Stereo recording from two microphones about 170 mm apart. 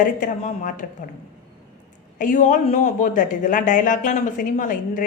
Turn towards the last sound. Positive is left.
turn(degrees=50)  # may be behind; listen again after turning